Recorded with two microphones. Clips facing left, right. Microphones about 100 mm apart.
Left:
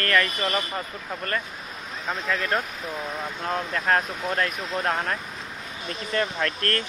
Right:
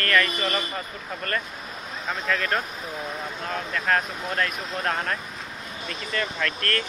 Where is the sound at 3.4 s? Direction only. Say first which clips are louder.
Left 2 dB; 25° left (ahead or behind).